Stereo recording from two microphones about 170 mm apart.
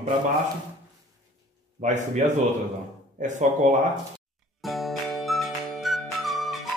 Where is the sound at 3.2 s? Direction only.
45° right (ahead or behind).